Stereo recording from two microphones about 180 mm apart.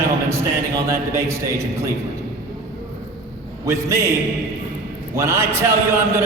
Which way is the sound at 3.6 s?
15° right (ahead or behind).